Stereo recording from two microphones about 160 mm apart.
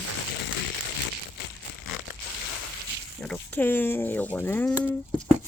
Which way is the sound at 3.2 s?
10° left (ahead or behind).